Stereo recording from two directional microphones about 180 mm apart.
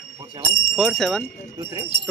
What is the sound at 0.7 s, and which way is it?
Speech, 5° left (ahead or behind).